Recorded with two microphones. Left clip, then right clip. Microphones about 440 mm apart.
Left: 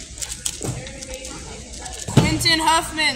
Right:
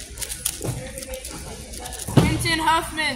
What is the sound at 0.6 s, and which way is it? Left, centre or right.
Music, centre.